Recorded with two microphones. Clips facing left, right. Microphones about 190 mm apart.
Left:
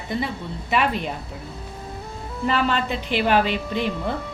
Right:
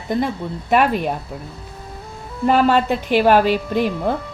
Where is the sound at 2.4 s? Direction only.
45° right (ahead or behind).